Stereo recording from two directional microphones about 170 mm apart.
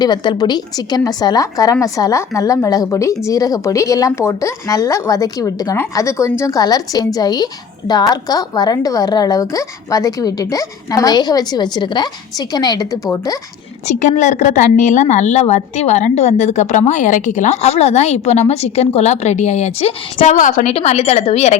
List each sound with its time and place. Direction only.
0.0 s a woman's voice: 25° left (ahead or behind)
13.8 s a woman's voice: 45° left (ahead or behind)